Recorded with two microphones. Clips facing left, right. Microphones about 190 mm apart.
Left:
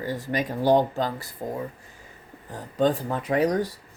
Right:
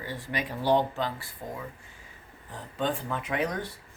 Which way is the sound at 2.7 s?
40° left (ahead or behind).